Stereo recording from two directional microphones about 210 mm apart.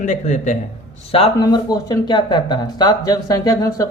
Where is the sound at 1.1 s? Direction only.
25° left (ahead or behind).